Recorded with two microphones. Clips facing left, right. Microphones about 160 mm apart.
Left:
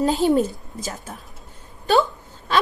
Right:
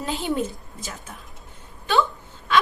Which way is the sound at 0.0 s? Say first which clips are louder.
Left 8 dB; 40° left (ahead or behind).